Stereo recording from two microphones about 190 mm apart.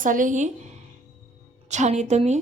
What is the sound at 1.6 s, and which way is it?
Speech, 35° right (ahead or behind).